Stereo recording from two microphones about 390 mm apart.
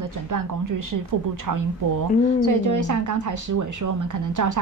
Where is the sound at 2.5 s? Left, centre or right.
Right.